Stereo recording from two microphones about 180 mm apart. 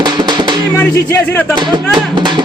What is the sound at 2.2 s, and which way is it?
Speech, 25° right (ahead or behind).